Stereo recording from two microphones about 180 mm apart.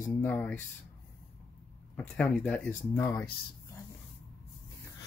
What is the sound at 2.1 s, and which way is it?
Speech, 5° left (ahead or behind).